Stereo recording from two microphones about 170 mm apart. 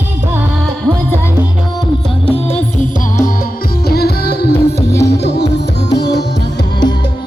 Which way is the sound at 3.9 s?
65° left (ahead or behind).